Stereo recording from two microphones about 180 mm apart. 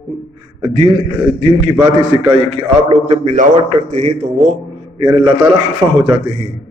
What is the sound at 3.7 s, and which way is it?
Speech, 40° right (ahead or behind).